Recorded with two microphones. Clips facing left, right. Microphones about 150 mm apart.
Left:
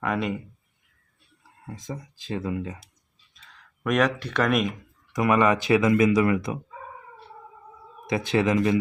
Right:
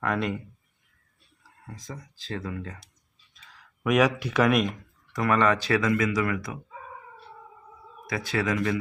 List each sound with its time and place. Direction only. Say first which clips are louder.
0.0 s speech: left 1 dB; 5° left (ahead or behind)
1.6 s speech: left 5 dB; 20° left (ahead or behind)
3.3 s speech: even; 5° right (ahead or behind)
5.1 s speech: left 2 dB; 15° left (ahead or behind)
8.0 s speech: left 5 dB; 25° left (ahead or behind)